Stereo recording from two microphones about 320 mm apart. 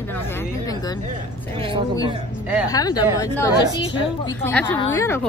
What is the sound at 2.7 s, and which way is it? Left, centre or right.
Speech, centre.